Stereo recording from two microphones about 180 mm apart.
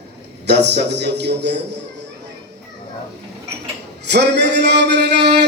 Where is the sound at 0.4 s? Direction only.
70° right (ahead or behind).